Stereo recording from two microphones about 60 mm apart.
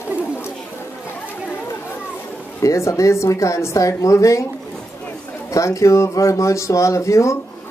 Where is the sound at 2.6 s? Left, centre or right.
Left.